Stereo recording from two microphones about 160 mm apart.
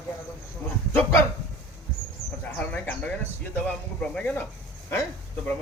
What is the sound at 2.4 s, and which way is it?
Speech, 10° left (ahead or behind).